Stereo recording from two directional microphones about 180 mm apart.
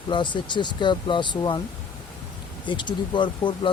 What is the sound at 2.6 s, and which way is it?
Speech, 25° left (ahead or behind).